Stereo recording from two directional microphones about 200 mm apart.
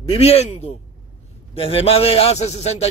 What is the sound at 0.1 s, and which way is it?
A man's voice, 30° left (ahead or behind).